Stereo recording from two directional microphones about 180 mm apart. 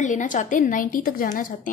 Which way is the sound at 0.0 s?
45° left (ahead or behind).